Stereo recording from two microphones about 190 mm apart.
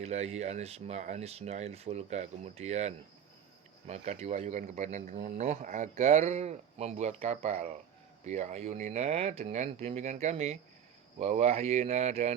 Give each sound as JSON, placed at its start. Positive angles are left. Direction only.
{"t": 0.0, "sound": "speech", "side_deg": -35}